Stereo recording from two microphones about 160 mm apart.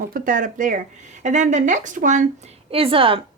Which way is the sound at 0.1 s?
55° right (ahead or behind).